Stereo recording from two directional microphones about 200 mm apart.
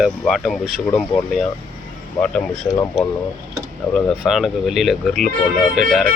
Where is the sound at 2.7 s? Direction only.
15° left (ahead or behind).